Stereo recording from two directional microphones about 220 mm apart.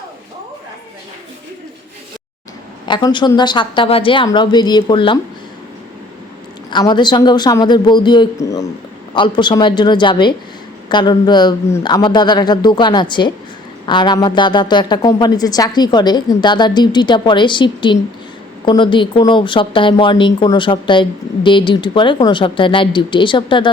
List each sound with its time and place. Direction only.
2.8 s speech: 20° left (ahead or behind)
6.7 s speech: 20° left (ahead or behind)